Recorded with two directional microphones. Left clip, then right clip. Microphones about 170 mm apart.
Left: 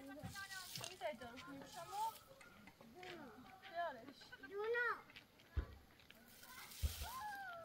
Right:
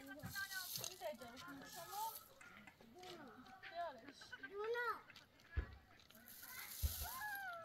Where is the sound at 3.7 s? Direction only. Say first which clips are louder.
Left 3 dB; 90° left.